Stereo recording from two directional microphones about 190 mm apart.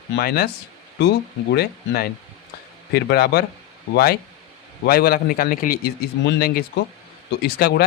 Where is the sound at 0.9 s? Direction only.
65° left (ahead or behind).